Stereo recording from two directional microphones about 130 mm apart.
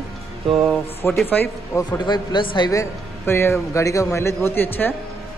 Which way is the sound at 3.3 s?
20° left (ahead or behind).